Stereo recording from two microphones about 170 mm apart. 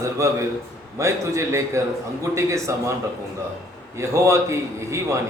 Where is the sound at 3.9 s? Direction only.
15° right (ahead or behind).